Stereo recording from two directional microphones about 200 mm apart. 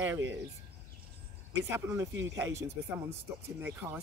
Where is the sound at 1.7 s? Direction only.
15° right (ahead or behind).